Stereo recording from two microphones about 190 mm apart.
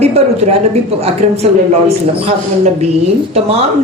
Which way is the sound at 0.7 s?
35° right (ahead or behind).